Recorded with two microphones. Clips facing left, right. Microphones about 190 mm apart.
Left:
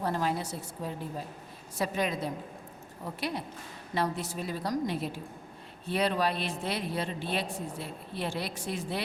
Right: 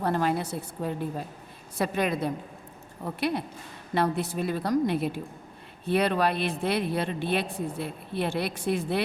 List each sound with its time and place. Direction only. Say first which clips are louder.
0.0 s a woman's voice: right 4 dB; 60° right (ahead or behind)